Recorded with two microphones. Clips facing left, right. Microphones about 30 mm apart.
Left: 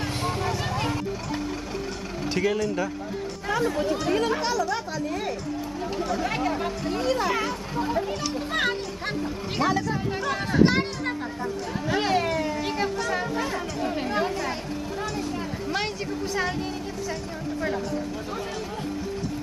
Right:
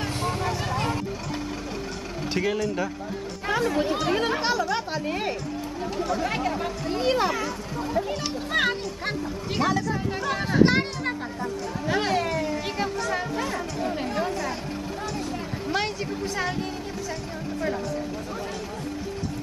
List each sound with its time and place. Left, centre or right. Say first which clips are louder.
0.0 s a sound: even; centre
2.3 s speech: left 1 dB; centre
3.4 s chatter: right 1 dB; centre
4.2 s speech: even; right
5.8 s speech: right 1 dB; centre
7.0 s speech: right 3 dB; right
7.3 s speech: left 2 dB; centre
8.5 s speech: right 3 dB; centre
15.0 s speech: left 1 dB; centre